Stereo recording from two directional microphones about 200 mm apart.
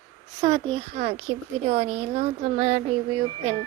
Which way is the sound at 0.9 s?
35° right (ahead or behind).